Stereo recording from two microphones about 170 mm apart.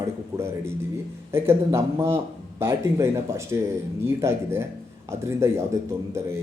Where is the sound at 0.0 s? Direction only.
15° right (ahead or behind).